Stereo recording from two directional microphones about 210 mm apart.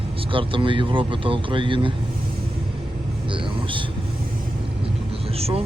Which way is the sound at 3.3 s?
25° right (ahead or behind).